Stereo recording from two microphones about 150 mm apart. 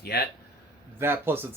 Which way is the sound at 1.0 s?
15° right (ahead or behind).